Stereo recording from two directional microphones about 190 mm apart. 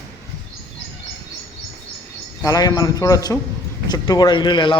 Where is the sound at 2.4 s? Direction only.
20° left (ahead or behind).